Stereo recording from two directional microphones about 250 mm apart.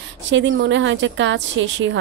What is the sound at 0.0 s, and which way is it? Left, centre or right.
Speech, right.